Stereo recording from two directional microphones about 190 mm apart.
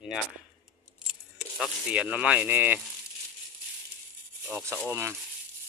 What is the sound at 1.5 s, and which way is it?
Speech, 5° right (ahead or behind).